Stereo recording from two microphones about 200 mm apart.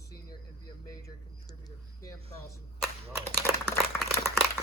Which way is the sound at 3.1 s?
15° right (ahead or behind).